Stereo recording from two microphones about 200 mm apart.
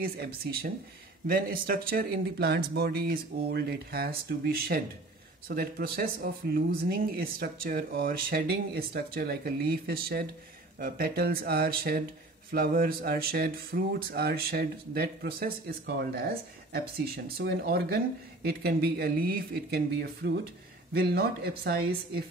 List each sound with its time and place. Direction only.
0.0 s speech: 50° right (ahead or behind)